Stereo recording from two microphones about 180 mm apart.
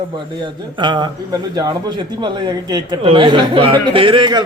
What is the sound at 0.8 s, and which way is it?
Speech, 25° right (ahead or behind).